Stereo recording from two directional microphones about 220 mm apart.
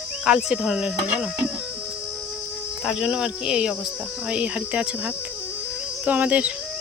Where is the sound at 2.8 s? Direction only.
5° right (ahead or behind).